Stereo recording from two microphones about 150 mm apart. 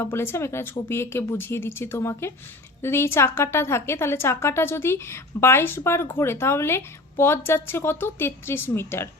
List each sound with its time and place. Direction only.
0.0 s a woman's voice: 15° left (ahead or behind)